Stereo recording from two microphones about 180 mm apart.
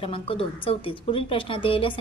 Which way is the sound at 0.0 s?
30° left (ahead or behind).